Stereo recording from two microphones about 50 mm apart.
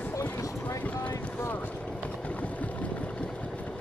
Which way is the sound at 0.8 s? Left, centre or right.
Left.